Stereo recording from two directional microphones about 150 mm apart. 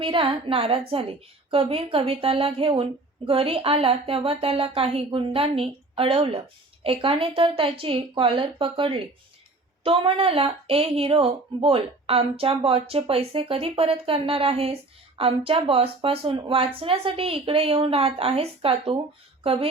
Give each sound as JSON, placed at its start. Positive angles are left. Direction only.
{"t": 0.0, "sound": "speech", "side_deg": -35}